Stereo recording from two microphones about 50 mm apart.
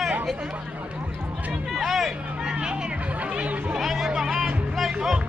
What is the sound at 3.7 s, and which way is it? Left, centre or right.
Speech, centre.